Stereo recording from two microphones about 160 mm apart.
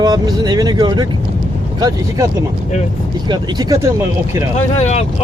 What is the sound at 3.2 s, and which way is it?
Speech, 25° right (ahead or behind).